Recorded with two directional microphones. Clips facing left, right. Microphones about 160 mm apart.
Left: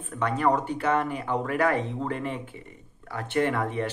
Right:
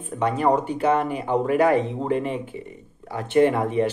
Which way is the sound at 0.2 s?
20° right (ahead or behind).